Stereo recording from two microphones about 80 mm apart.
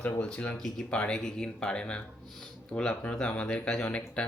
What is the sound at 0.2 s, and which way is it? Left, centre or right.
Speech, centre.